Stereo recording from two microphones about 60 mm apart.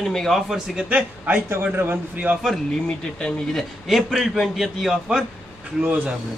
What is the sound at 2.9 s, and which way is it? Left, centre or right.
Speech, centre.